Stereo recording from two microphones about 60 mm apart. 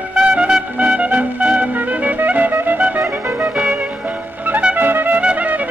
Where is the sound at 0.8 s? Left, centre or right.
Right.